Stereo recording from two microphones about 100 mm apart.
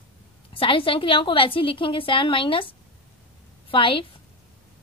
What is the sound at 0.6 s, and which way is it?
A woman's voice, 60° left (ahead or behind).